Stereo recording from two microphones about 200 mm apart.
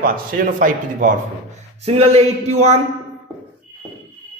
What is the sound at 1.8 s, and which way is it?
Speech, 30° right (ahead or behind).